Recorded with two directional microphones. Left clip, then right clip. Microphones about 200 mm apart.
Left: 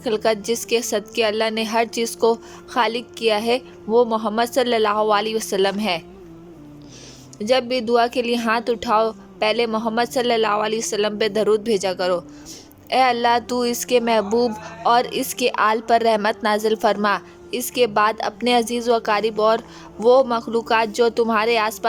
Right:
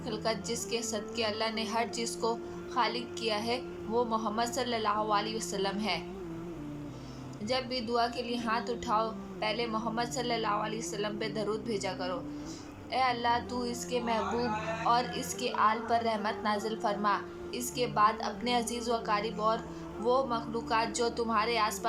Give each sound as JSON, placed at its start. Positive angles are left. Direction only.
{"t": 0.0, "sound": "a woman's voice", "side_deg": 50}
{"t": 7.4, "sound": "a woman's voice", "side_deg": 50}